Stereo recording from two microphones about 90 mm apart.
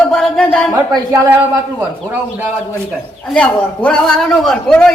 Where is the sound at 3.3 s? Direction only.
10° left (ahead or behind).